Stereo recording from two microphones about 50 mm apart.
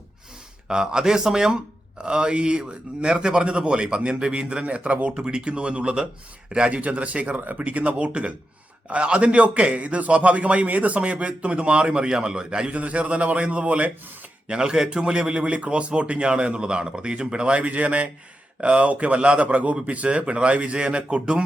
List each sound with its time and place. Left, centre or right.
0.7 s a man's voice: centre
14.4 s a man's voice: centre